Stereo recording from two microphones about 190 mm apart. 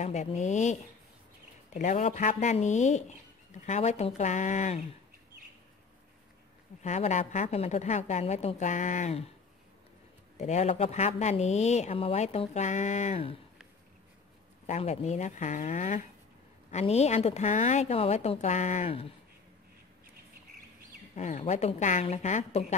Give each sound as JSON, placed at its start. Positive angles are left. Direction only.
{"t": 0.0, "sound": "speech", "side_deg": 35}
{"t": 6.8, "sound": "speech", "side_deg": 40}
{"t": 10.3, "sound": "speech", "side_deg": 35}
{"t": 14.7, "sound": "speech", "side_deg": 35}
{"t": 21.1, "sound": "speech", "side_deg": 35}